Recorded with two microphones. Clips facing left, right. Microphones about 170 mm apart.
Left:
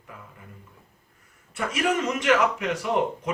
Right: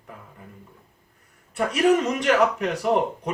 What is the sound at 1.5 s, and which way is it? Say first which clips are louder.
A man's voice: right 6 dB; 35° right (ahead or behind).